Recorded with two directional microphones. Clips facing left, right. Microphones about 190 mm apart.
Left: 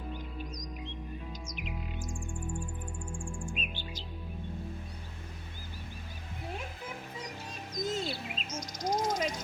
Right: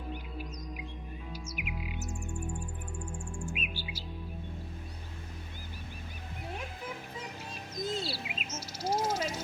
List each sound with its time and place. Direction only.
1.5 s music: 5° right (ahead or behind)
3.5 s bird: 10° right (ahead or behind)
7.7 s bird: 5° right (ahead or behind)